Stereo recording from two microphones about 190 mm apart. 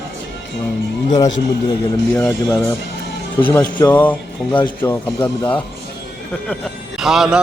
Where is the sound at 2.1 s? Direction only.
5° left (ahead or behind).